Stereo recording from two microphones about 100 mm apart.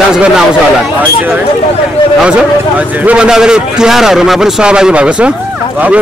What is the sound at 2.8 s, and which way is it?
A man's voice, 10° right (ahead or behind).